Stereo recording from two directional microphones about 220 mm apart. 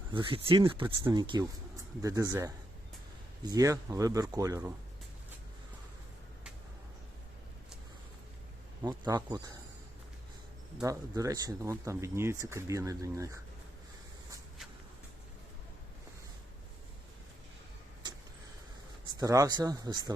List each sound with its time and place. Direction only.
0.1 s speech: 25° right (ahead or behind)
0.6 s speech: 10° right (ahead or behind)
8.8 s speech: 20° right (ahead or behind)
10.8 s speech: 15° right (ahead or behind)
18.0 s vehicle: 20° right (ahead or behind)
19.2 s speech: 15° right (ahead or behind)